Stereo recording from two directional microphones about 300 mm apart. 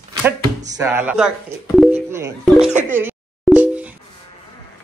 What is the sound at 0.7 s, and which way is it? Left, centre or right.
Speech, centre.